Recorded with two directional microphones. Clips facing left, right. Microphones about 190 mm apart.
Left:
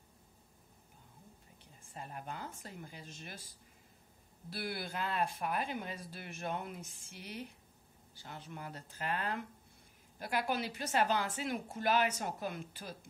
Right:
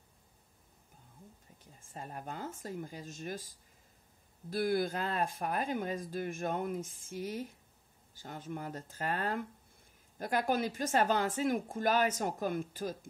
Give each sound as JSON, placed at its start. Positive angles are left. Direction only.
{"t": 1.6, "sound": "speech", "side_deg": -40}
{"t": 4.5, "sound": "speech", "side_deg": -45}